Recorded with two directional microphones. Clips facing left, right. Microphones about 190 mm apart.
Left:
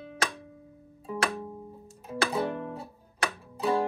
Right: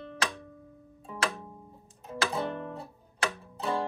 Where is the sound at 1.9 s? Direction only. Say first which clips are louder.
Left 2 dB; 5° left (ahead or behind).